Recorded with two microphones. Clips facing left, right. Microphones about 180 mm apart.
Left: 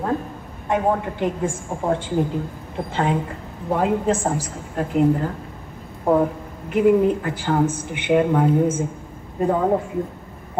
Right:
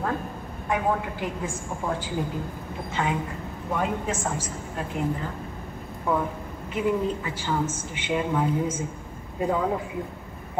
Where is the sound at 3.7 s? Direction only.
35° left (ahead or behind).